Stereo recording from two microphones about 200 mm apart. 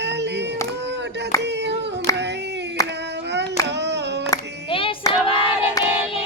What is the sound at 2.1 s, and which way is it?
Female singing, 15° left (ahead or behind).